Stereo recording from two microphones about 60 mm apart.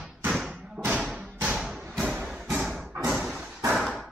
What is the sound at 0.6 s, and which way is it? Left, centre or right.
Thump, centre.